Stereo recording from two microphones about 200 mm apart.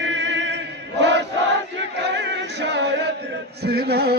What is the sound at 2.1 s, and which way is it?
Crowd, 60° right (ahead or behind).